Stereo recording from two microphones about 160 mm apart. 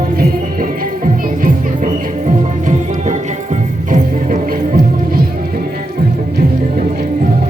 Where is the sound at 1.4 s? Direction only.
50° right (ahead or behind).